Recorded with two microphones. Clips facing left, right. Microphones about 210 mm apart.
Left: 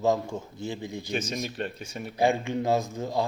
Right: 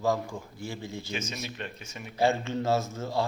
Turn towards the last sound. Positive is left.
turn(degrees=15)  # may be behind; listen again after turning